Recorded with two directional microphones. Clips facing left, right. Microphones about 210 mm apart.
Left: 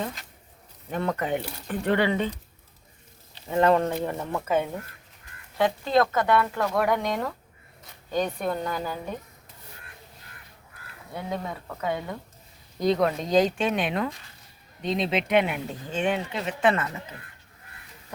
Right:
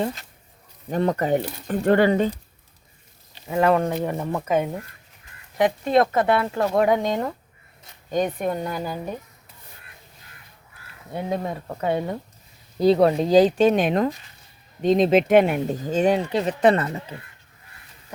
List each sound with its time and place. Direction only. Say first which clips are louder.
0.9 s speech: right 6 dB; 35° right (ahead or behind)
3.3 s speech: right 1 dB; 10° right (ahead or behind)
11.1 s speech: right 5 dB; 30° right (ahead or behind)